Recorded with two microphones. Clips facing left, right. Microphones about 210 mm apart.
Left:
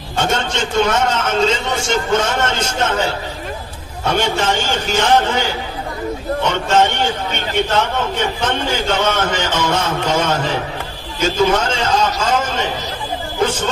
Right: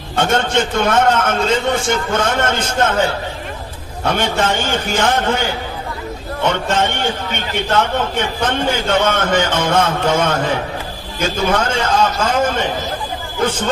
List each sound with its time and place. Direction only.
0.2 s a man's voice: 55° right (ahead or behind)
4.0 s a man's voice: 55° right (ahead or behind)
6.5 s a man's voice: 55° right (ahead or behind)